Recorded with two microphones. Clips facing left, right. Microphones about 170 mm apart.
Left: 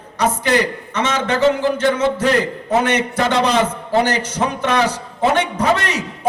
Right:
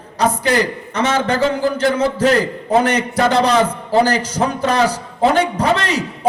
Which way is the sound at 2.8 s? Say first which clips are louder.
Right 2 dB; 35° right (ahead or behind).